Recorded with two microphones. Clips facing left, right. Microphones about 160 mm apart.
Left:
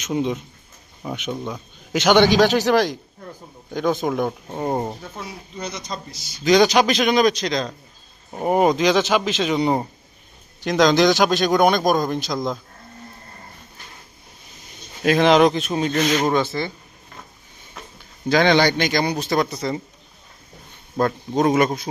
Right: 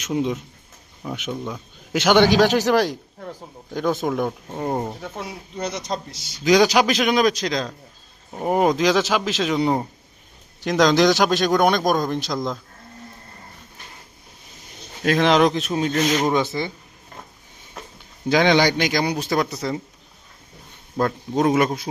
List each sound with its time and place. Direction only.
0.1 s speech: centre (ahead or behind)
1.3 s speech: 15° left (ahead or behind)
1.9 s speech: 5° right (ahead or behind); by 4.9 s 10° left (ahead or behind)
4.9 s speech: 65° right (ahead or behind)
6.4 s speech: 10° right (ahead or behind)
10.9 s speech: centre (ahead or behind)
15.0 s speech: 5° left (ahead or behind)
16.3 s speech: 15° right (ahead or behind)
18.3 s speech: 10° right (ahead or behind)
20.9 s speech: centre (ahead or behind)